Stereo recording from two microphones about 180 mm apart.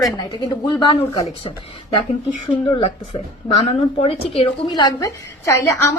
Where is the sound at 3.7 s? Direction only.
35° left (ahead or behind).